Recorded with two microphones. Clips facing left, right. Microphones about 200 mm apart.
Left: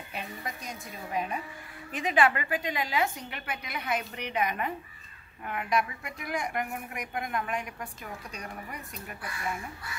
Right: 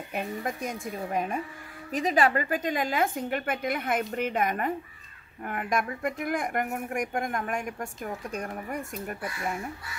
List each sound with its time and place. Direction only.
0.1 s speech: 50° right (ahead or behind)